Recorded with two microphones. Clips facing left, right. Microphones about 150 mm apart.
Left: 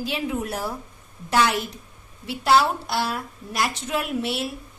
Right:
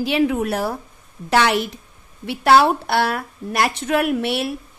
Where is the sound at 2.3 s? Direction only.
65° right (ahead or behind).